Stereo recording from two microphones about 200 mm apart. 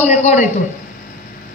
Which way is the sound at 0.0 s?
35° left (ahead or behind).